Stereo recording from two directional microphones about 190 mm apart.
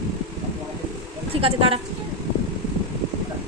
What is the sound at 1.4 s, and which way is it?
Speech, 30° right (ahead or behind).